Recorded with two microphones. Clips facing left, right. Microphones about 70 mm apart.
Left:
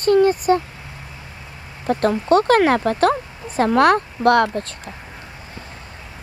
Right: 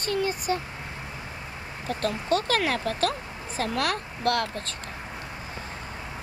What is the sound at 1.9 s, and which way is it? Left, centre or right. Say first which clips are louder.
Speech: left 10 dB; left.